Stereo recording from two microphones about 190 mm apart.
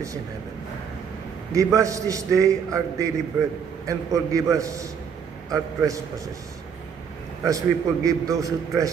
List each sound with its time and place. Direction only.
1.5 s a man's voice: 15° right (ahead or behind)
7.4 s a man's voice: 15° right (ahead or behind)